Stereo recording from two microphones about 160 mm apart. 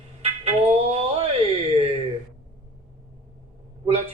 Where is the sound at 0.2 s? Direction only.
40° right (ahead or behind).